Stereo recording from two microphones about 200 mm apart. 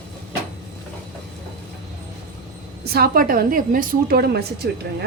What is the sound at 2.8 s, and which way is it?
A woman's voice, 50° right (ahead or behind).